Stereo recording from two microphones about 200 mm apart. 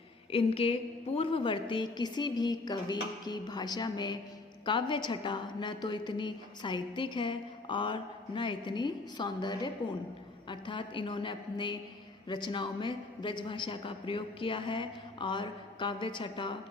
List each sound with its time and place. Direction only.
0.3 s a woman's voice: 30° left (ahead or behind)